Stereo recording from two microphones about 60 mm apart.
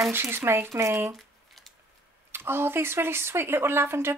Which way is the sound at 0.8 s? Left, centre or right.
Right.